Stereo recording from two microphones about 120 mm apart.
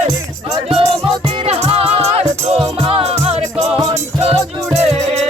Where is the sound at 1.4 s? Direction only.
60° right (ahead or behind).